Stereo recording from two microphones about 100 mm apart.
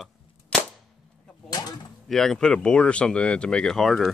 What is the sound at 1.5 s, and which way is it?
Speech, 40° left (ahead or behind).